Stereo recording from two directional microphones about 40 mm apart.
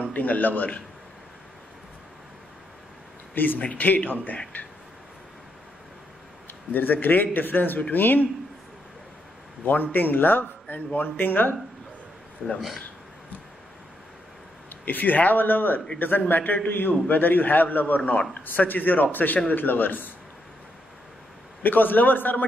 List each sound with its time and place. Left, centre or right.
0.0 s a man's voice: left
3.3 s a man's voice: left
3.6 s a man's voice: left
6.7 s a man's voice: left
9.9 s a man's voice: left
12.5 s speech: centre
14.7 s a man's voice: left
21.6 s a man's voice: left